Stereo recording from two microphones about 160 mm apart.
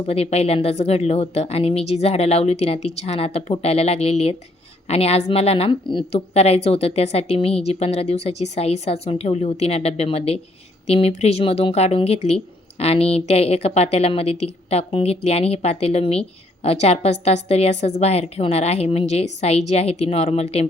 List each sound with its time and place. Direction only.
0.0 s speech: 40° left (ahead or behind)